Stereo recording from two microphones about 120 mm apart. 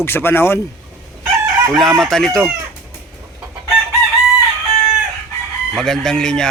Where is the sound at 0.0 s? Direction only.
20° left (ahead or behind).